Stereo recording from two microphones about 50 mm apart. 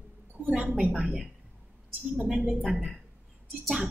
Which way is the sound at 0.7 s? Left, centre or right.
Right.